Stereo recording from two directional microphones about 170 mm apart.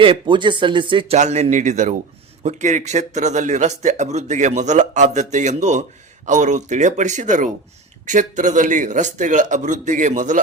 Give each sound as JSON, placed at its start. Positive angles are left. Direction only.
{"t": 0.0, "sound": "speech", "side_deg": -30}